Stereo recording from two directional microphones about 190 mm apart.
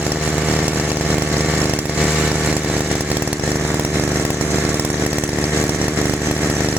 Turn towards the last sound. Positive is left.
turn(degrees=-10)  # may be behind; listen again after turning